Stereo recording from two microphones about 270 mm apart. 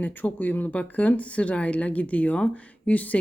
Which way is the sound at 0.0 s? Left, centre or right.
Centre.